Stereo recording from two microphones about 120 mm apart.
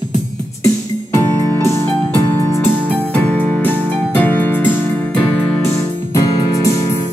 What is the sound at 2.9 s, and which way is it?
Music, 10° left (ahead or behind).